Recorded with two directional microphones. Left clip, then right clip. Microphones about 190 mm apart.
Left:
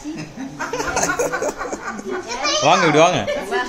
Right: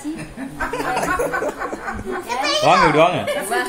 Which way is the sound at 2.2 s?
60° right (ahead or behind).